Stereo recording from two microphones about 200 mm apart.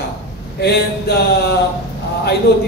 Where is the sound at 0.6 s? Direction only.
55° left (ahead or behind).